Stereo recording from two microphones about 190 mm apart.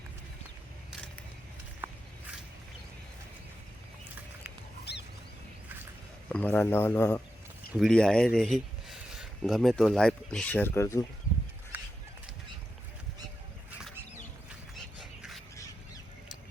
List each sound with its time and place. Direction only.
1.8 s walk: 10° right (ahead or behind)
4.9 s a sound: 60° left (ahead or behind)
6.2 s speech: 5° left (ahead or behind)
7.7 s speech: centre (ahead or behind)
11.7 s horse: 10° right (ahead or behind)
14.9 s bird: centre (ahead or behind)